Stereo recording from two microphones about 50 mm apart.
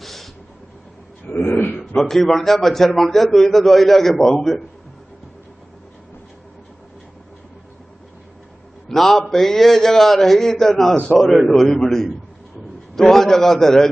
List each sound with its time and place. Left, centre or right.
0.0 s vehicle: centre
1.2 s a sound: left
2.0 s a man's voice: centre
8.9 s a man's voice: centre